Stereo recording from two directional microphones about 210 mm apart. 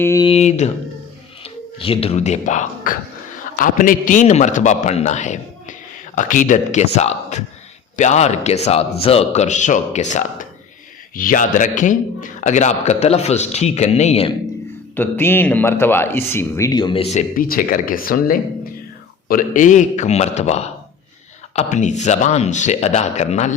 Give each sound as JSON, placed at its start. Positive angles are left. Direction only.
{"t": 0.0, "sound": "a man's voice", "side_deg": 15}
{"t": 0.3, "sound": "a man's voice", "side_deg": 30}
{"t": 1.8, "sound": "a man's voice", "side_deg": 25}
{"t": 14.9, "sound": "a man's voice", "side_deg": 10}